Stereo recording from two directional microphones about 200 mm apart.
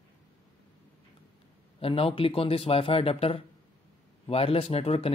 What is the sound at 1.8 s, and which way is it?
Speech, 30° left (ahead or behind).